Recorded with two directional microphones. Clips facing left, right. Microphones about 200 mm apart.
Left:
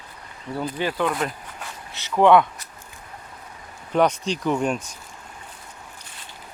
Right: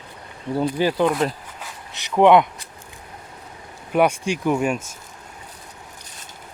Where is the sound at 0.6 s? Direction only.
30° right (ahead or behind).